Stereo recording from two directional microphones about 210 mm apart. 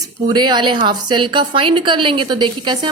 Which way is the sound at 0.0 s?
20° right (ahead or behind).